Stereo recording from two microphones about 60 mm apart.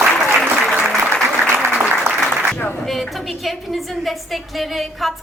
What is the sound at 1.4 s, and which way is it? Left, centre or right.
Applause, right.